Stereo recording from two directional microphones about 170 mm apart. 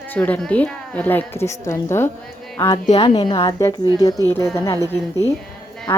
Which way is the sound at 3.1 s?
25° left (ahead or behind).